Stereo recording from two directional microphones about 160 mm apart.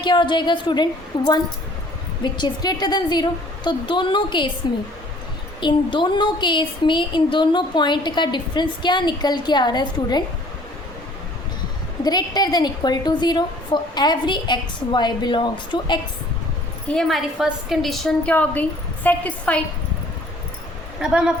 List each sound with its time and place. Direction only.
0.0 s a woman's voice: 30° left (ahead or behind)
12.0 s a woman's voice: 25° left (ahead or behind)
16.9 s a woman's voice: centre (ahead or behind)
21.0 s a woman's voice: 5° right (ahead or behind)